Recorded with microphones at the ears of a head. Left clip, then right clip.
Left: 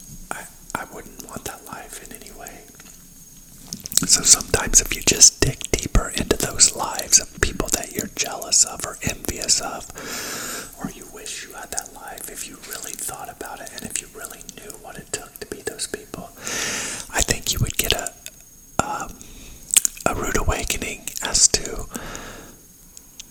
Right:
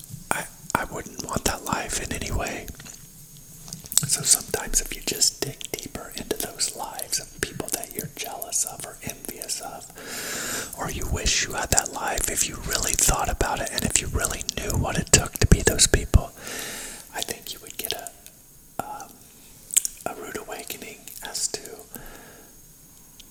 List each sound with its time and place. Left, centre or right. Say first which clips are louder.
1.1 s whispering: right 7 dB; right
3.7 s speech: left 7 dB; left
10.8 s speech: right 5 dB; right
16.4 s whispering: left 8 dB; left
18.8 s a sound: left 9 dB; left
19.7 s whispering: left 7 dB; left